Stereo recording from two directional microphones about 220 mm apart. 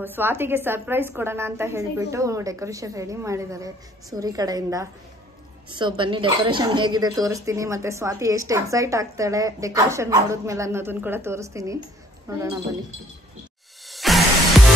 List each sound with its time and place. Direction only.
0.0 s speech: 10° right (ahead or behind)
13.8 s music: centre (ahead or behind)